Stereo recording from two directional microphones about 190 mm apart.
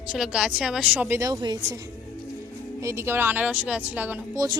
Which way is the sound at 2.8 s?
15° right (ahead or behind).